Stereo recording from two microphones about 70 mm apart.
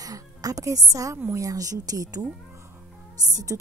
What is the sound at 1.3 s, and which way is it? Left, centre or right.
Speech, right.